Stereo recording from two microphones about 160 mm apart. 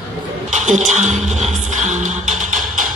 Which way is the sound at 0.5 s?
50° right (ahead or behind).